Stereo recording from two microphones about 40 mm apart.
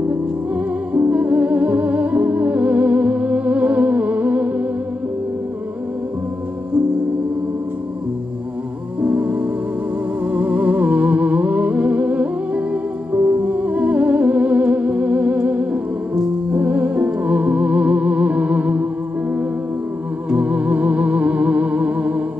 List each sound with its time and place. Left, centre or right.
0.1 s music: right
9.0 s music: right